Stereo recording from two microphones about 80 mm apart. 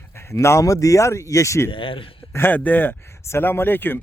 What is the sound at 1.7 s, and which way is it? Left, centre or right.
Speech, left.